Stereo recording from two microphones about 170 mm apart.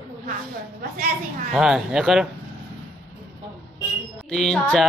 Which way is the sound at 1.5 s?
5° right (ahead or behind).